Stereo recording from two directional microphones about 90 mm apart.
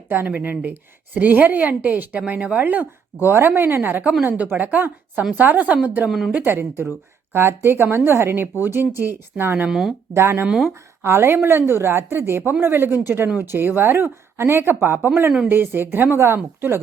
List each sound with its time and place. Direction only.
0.1 s a woman's voice: 20° right (ahead or behind)
6.1 s speech: 5° right (ahead or behind)
6.3 s speech: 25° right (ahead or behind)
9.6 s speech: 5° right (ahead or behind)
10.2 s speech: 30° right (ahead or behind)
10.4 s a woman's voice: 5° right (ahead or behind)
11.0 s speech: 30° right (ahead or behind)